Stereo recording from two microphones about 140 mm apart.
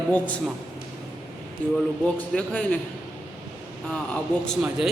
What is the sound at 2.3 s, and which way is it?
Speech, 10° left (ahead or behind).